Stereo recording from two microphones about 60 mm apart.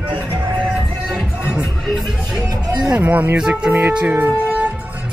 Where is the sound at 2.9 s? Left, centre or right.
Right.